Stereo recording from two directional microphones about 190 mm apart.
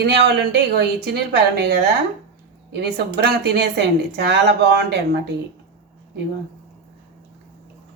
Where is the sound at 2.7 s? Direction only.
60° right (ahead or behind).